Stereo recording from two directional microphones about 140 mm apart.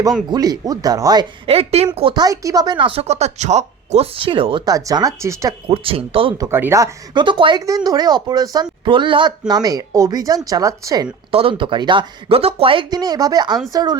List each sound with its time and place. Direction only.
0.3 s speech: 30° right (ahead or behind)
1.5 s speech: 45° right (ahead or behind)
2.1 s speech: 25° right (ahead or behind)
5.6 s speech: 40° right (ahead or behind)
6.3 s speech: 25° right (ahead or behind)
11.3 s speech: 40° right (ahead or behind); by 13.9 s 25° right (ahead or behind)